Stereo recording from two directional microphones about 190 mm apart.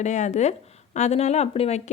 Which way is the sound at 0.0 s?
40° left (ahead or behind).